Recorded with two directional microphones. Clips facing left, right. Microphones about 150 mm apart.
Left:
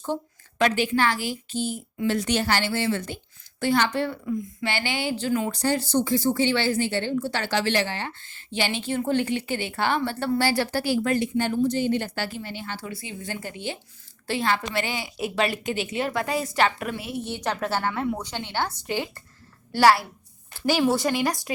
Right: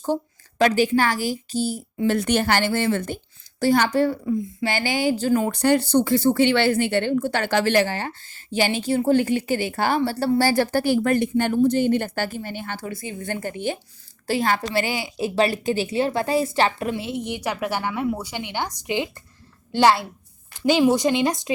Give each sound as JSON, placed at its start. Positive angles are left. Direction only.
{"t": 0.6, "sound": "a woman's voice", "side_deg": -40}
{"t": 2.1, "sound": "a woman's voice", "side_deg": -55}
{"t": 3.6, "sound": "a woman's voice", "side_deg": -40}